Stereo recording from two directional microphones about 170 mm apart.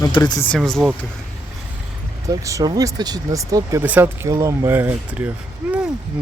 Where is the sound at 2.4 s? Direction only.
20° right (ahead or behind).